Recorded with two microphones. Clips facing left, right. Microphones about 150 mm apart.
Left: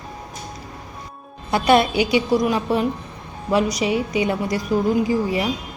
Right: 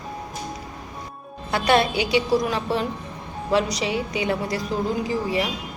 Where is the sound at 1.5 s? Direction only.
20° left (ahead or behind).